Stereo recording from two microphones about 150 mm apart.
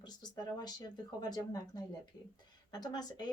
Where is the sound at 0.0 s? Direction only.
30° left (ahead or behind).